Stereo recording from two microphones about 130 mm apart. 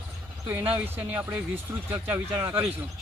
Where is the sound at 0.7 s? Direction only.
15° right (ahead or behind).